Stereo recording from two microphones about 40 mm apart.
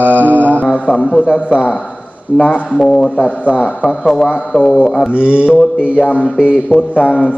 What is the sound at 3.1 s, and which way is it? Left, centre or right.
Speech, left.